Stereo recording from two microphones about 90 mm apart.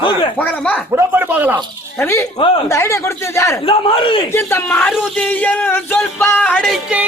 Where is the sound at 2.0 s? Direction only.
30° left (ahead or behind).